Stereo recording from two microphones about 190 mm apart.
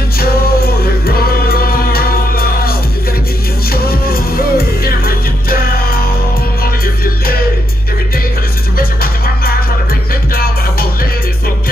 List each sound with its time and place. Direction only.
0.2 s music: 50° left (ahead or behind)
3.7 s music: 50° left (ahead or behind)
8.7 s music: 50° left (ahead or behind)